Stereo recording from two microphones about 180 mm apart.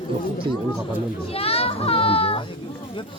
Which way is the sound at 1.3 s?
35° left (ahead or behind).